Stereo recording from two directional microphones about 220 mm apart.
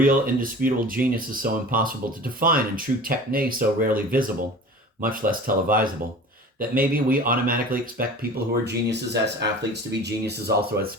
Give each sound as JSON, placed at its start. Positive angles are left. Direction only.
{"t": 0.0, "sound": "speech", "side_deg": -40}